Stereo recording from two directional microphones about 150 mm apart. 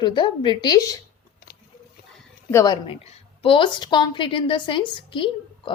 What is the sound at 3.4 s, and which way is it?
Speech, 35° left (ahead or behind).